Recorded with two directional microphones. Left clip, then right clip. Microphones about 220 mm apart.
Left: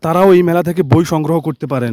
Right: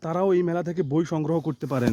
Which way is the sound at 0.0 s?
40° left (ahead or behind).